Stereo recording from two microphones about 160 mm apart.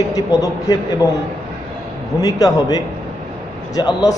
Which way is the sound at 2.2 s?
25° left (ahead or behind).